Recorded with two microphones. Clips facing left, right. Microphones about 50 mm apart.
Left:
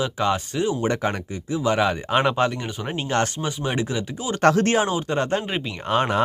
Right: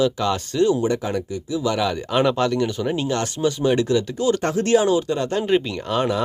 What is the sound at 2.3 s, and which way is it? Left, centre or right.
Speech, left.